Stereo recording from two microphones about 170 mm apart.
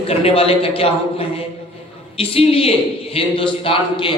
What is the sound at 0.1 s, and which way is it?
Speech, 35° left (ahead or behind).